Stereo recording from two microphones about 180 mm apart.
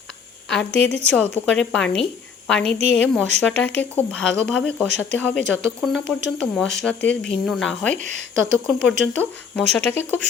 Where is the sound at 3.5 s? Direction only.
90° left.